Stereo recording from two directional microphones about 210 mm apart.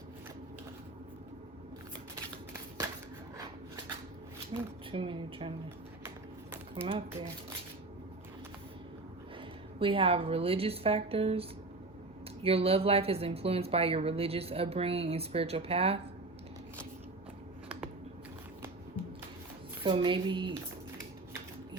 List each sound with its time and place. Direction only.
4.9 s speech: 25° right (ahead or behind)
6.8 s speech: 25° right (ahead or behind)
9.8 s speech: 25° right (ahead or behind)
19.8 s speech: 25° right (ahead or behind)